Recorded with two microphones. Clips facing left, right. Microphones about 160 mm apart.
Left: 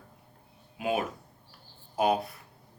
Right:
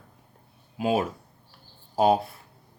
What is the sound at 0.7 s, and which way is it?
Speech, 30° right (ahead or behind).